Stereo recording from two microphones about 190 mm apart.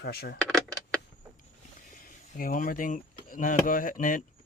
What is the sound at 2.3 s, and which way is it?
Speech, 45° left (ahead or behind).